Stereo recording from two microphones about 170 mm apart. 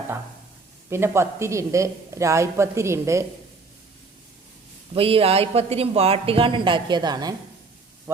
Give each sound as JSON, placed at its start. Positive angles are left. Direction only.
{"t": 0.9, "sound": "a man's voice", "side_deg": -15}
{"t": 4.9, "sound": "speech", "side_deg": -35}